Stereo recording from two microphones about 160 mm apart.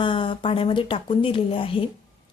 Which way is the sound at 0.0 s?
30° left (ahead or behind).